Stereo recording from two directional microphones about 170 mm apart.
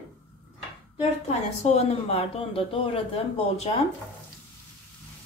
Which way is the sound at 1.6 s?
35° left (ahead or behind).